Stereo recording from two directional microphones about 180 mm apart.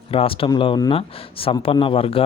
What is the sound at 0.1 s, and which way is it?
Speech, 30° left (ahead or behind).